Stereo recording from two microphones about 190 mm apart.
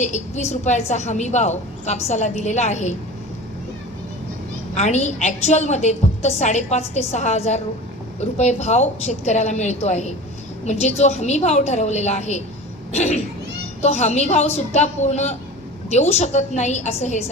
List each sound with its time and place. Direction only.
0.0 s a woman's voice: 40° left (ahead or behind)
4.8 s a woman's voice: 35° left (ahead or behind)